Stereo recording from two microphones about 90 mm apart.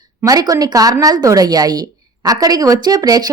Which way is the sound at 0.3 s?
40° right (ahead or behind).